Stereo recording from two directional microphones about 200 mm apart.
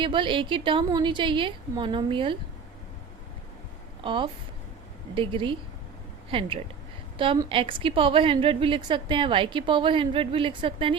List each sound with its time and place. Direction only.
0.0 s a woman's voice: 25° right (ahead or behind)
4.0 s a woman's voice: 25° right (ahead or behind)